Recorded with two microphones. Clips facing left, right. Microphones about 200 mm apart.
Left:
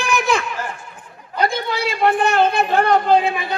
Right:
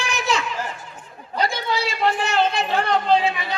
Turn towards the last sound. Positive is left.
turn(degrees=55)  # may be behind; listen again after turning